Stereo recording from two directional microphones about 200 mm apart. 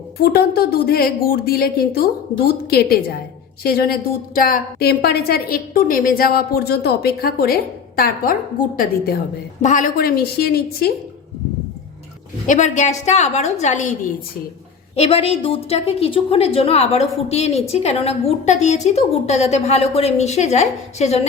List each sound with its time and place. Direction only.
0.2 s a woman's voice: 50° left (ahead or behind)
9.6 s a woman's voice: 40° left (ahead or behind)
12.5 s a woman's voice: 35° left (ahead or behind)
14.9 s a woman's voice: 30° left (ahead or behind)